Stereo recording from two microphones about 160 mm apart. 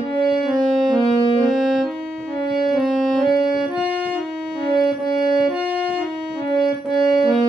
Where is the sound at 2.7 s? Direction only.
Centre (ahead or behind).